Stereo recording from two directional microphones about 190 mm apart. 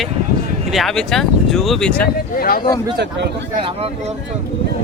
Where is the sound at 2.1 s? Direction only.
50° left (ahead or behind).